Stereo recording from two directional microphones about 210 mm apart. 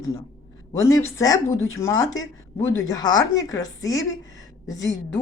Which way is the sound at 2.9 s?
20° left (ahead or behind).